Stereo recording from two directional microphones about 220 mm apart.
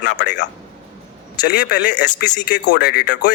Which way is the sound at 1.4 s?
50° left (ahead or behind).